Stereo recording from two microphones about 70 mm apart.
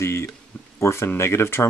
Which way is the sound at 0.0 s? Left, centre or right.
Left.